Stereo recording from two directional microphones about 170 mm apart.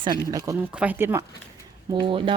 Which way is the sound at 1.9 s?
30° right (ahead or behind).